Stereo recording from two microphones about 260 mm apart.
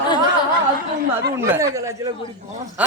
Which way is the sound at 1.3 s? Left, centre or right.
Centre.